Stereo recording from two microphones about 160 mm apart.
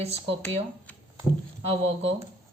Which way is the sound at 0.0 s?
40° right (ahead or behind).